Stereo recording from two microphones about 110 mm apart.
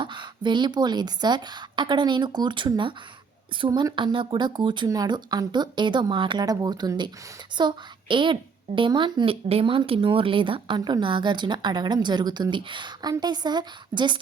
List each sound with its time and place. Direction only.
0.0 s a woman's voice: 45° right (ahead or behind)